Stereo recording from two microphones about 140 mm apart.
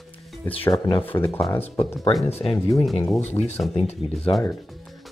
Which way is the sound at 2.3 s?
45° left (ahead or behind).